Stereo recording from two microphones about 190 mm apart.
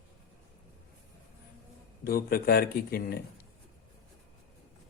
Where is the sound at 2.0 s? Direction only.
55° left (ahead or behind).